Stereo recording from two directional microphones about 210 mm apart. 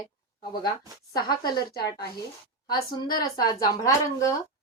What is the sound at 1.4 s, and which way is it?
Speech, 20° left (ahead or behind).